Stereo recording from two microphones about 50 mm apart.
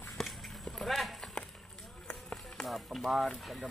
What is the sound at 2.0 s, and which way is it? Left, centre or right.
Run, centre.